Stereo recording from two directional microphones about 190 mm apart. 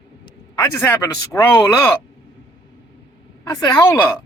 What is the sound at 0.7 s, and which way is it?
Speech, 15° left (ahead or behind).